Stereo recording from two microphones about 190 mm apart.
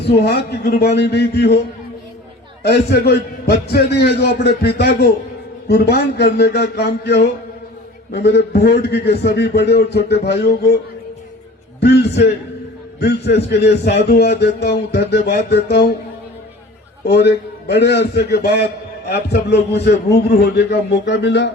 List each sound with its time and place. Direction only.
0.0 s a man's voice: 60° left (ahead or behind)
2.6 s a man's voice: 60° left (ahead or behind)
11.8 s a man's voice: 65° left (ahead or behind)
17.1 s a man's voice: 60° left (ahead or behind)